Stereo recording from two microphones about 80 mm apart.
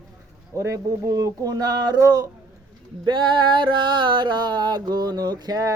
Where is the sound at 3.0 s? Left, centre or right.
Right.